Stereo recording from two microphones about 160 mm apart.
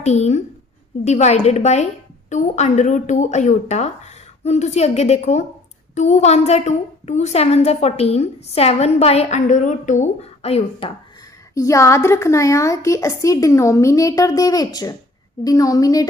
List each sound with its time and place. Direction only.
0.0 s a woman's voice: 45° left (ahead or behind)
11.5 s a woman's voice: 20° left (ahead or behind)